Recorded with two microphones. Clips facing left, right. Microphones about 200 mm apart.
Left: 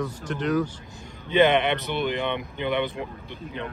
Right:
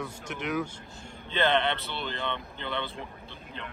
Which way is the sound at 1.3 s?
15° left (ahead or behind).